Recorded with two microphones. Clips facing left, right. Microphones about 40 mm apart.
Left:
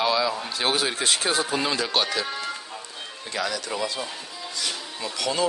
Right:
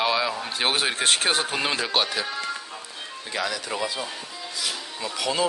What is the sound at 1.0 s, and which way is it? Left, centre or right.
Speech, right.